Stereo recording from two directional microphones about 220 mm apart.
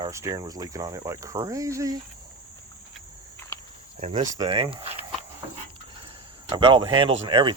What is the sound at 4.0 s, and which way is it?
Speech, 30° right (ahead or behind).